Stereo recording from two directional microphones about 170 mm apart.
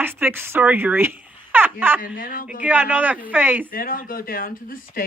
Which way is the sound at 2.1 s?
55° left (ahead or behind).